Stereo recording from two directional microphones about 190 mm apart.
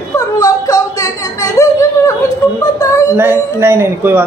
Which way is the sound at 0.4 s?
20° left (ahead or behind).